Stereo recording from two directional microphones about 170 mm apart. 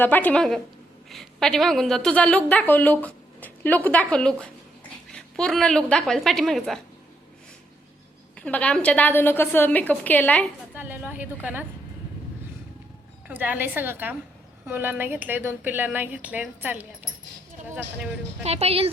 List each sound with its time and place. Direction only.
0.0 s a woman's voice: 10° left (ahead or behind)
8.4 s a woman's voice: 10° left (ahead or behind)
10.8 s a woman's voice: 10° right (ahead or behind)
13.2 s a woman's voice: 10° right (ahead or behind)
18.4 s a woman's voice: 35° right (ahead or behind)